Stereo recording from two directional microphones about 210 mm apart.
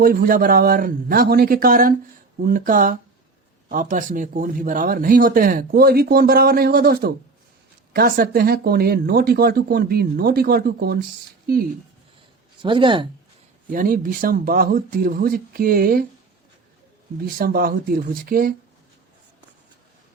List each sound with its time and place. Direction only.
0.0 s speech: 45° right (ahead or behind)
12.6 s speech: 25° right (ahead or behind)
13.7 s speech: 45° right (ahead or behind)
17.2 s speech: 45° right (ahead or behind)